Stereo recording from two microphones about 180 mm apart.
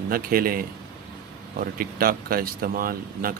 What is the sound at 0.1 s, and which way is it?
Speech, 55° right (ahead or behind).